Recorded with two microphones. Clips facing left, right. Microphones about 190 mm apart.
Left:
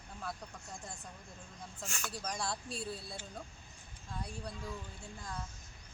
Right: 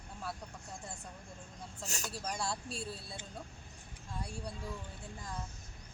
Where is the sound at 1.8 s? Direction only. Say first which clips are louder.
Right 1 dB; 40° right (ahead or behind).